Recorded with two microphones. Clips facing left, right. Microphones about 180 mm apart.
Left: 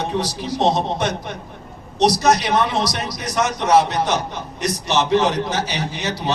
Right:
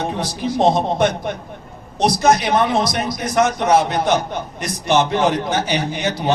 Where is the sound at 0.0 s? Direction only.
55° right (ahead or behind).